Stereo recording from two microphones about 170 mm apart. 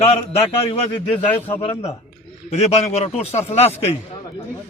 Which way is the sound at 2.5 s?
40° left (ahead or behind).